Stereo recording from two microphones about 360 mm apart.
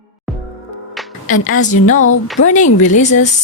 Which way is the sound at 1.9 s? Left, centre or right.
Left.